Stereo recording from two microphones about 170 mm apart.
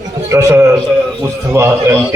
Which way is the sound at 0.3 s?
15° right (ahead or behind).